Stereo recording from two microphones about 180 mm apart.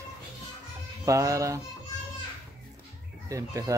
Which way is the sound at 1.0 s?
20° right (ahead or behind).